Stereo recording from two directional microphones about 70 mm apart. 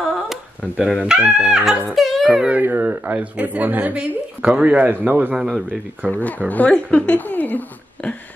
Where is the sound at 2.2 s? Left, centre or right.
Centre.